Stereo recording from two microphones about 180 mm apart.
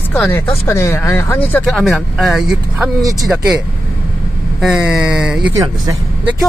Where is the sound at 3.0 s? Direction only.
20° right (ahead or behind).